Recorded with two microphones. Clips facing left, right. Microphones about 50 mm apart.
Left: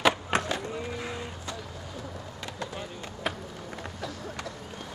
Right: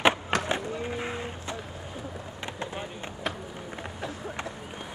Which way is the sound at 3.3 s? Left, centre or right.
Centre.